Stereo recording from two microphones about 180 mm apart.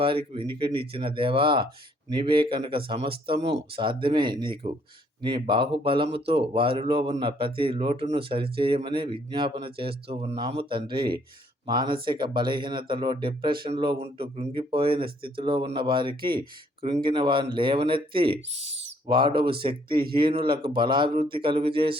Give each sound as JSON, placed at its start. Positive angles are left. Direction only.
{"t": 0.0, "sound": "speech", "side_deg": -30}
{"t": 18.7, "sound": "owl", "side_deg": -90}
{"t": 19.0, "sound": "speech", "side_deg": -25}